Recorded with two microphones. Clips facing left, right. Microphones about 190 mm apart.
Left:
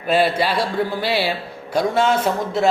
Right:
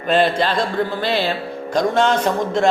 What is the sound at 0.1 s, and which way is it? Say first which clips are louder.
A woman's voice: right 1 dB; 10° left (ahead or behind).